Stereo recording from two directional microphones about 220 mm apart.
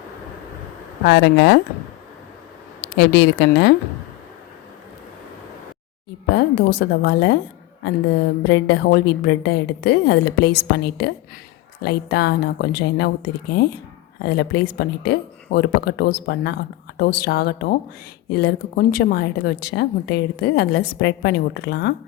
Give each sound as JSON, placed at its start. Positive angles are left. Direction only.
{"t": 1.0, "sound": "a woman's voice", "side_deg": 50}
{"t": 3.0, "sound": "a woman's voice", "side_deg": 50}
{"t": 6.3, "sound": "a woman's voice", "side_deg": 50}